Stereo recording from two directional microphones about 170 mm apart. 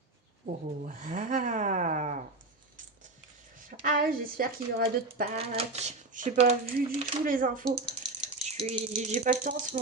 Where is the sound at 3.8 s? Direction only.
55° right (ahead or behind).